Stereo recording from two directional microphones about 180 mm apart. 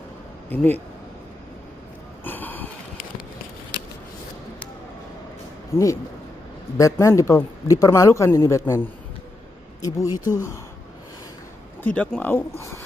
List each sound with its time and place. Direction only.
2.2 s a sound: 10° left (ahead or behind)
5.7 s speech: 15° left (ahead or behind)
11.8 s speech: 5° left (ahead or behind)